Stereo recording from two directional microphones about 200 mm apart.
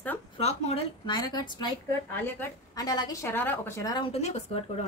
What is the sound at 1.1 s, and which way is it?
A woman's voice, 20° left (ahead or behind).